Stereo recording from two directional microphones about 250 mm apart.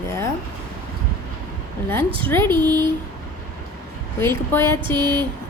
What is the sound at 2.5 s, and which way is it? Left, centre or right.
Speech, centre.